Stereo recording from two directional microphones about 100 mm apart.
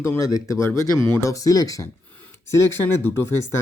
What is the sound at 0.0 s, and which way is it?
Speech, 30° left (ahead or behind).